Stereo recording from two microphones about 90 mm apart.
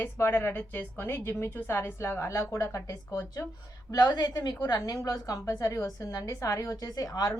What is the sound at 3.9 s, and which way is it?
A woman's voice, 50° left (ahead or behind).